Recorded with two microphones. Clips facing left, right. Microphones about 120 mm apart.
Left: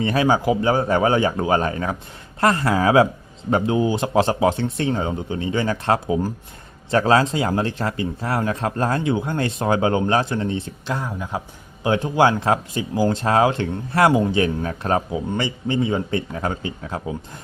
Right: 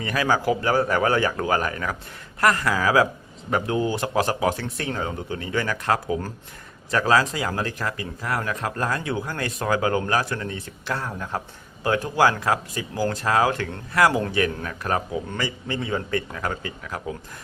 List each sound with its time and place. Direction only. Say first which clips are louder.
0.0 s speech: left 4 dB; 25° left (ahead or behind)